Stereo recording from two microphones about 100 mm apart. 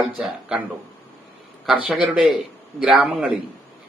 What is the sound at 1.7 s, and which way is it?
Speech, 15° right (ahead or behind).